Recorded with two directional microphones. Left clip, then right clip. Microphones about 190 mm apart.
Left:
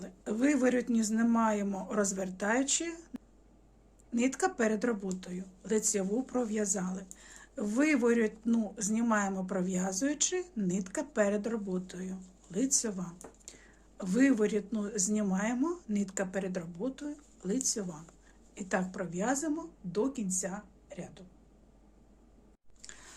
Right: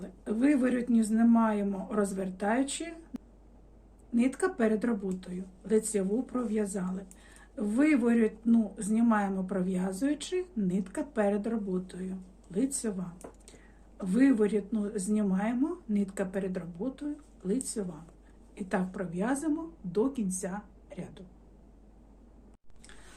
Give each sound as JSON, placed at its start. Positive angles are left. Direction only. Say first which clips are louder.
{"t": 0.0, "sound": "speech", "louder": "right 2 dB", "side_deg": 30}
{"t": 3.1, "sound": "a sound", "louder": "right 2 dB", "side_deg": 0}
{"t": 4.1, "sound": "speech", "louder": "right 1 dB", "side_deg": 30}